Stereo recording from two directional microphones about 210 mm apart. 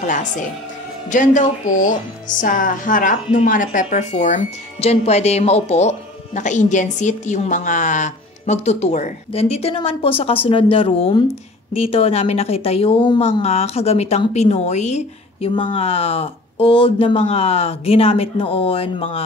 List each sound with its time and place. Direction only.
0.0 s a woman's voice: 35° left (ahead or behind)